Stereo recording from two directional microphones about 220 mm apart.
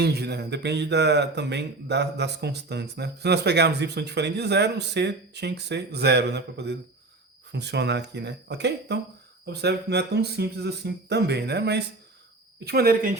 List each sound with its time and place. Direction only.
0.0 s speech: 50° right (ahead or behind)